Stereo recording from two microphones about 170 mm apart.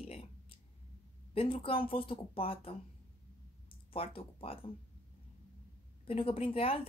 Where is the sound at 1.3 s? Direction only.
35° left (ahead or behind).